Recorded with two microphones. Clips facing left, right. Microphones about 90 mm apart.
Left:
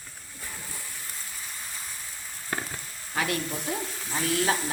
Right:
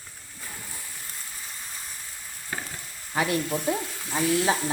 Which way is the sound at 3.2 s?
25° right (ahead or behind).